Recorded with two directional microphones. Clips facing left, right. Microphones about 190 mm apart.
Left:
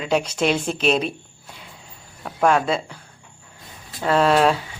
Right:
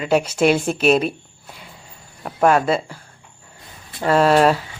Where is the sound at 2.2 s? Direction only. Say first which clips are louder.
Right 3 dB; 5° right (ahead or behind).